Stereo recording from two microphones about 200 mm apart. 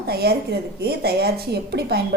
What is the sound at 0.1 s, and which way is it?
A woman's voice, 55° right (ahead or behind).